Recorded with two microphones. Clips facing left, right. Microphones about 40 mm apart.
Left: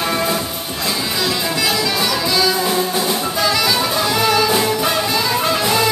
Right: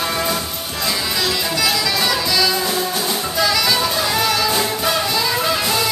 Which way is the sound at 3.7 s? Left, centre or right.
Centre.